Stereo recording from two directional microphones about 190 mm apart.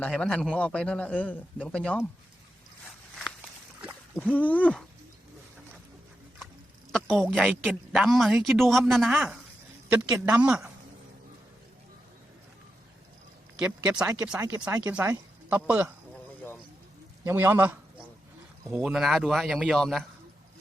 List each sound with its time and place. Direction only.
0.0 s speech: 5° left (ahead or behind)
4.2 s a sound: 10° left (ahead or behind)
6.9 s speech: 5° left (ahead or behind)
13.6 s speech: 5° right (ahead or behind)
14.3 s speech: 20° right (ahead or behind)
17.2 s speech: 10° right (ahead or behind)